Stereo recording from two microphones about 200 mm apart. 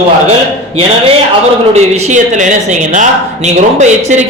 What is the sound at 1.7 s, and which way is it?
A man's voice, 30° right (ahead or behind).